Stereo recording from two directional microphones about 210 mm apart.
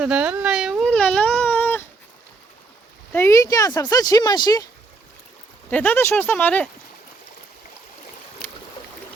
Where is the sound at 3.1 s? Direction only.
15° left (ahead or behind).